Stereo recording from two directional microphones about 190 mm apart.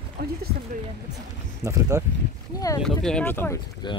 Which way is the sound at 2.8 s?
5° left (ahead or behind).